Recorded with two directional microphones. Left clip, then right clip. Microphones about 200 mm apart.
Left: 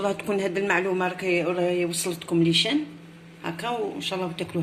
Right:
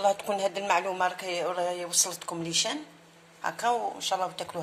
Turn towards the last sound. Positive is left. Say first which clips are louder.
# even
turn(degrees=-50)  # may be behind; listen again after turning